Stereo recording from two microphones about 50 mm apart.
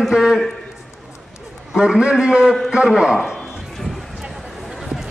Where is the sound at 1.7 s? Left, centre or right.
Centre.